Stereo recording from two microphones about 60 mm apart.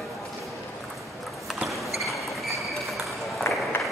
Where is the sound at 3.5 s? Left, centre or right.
Left.